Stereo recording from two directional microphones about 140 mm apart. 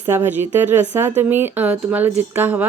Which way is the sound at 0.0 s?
15° right (ahead or behind).